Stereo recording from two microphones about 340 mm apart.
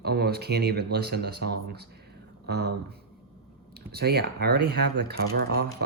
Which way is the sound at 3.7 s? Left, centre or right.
Right.